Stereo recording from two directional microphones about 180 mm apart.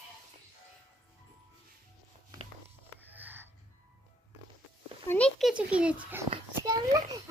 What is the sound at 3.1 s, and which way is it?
Music, 10° right (ahead or behind).